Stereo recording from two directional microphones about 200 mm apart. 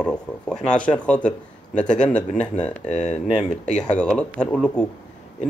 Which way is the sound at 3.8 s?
5° left (ahead or behind).